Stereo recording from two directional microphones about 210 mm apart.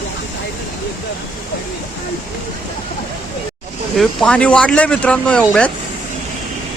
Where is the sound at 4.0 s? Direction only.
Centre (ahead or behind).